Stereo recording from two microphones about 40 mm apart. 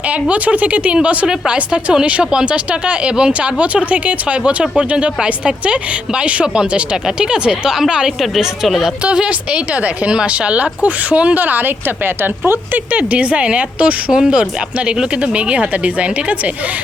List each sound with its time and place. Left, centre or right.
0.1 s speech: right
3.6 s speech: right
9.5 s speech: right
11.3 s speech: right
12.0 s speech: right
12.9 s speech: right
14.1 s speech: right